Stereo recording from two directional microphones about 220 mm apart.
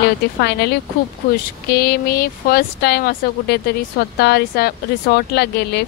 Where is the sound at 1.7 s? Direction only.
45° left (ahead or behind).